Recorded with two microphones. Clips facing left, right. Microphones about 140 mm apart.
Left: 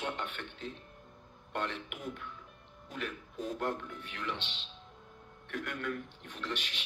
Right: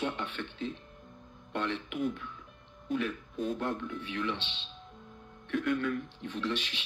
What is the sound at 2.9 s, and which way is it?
Speech, 60° right (ahead or behind).